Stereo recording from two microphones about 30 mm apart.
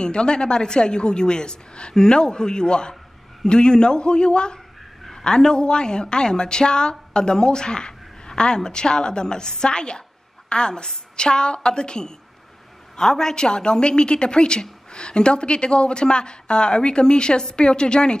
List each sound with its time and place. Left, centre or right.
0.0 s a woman's voice: left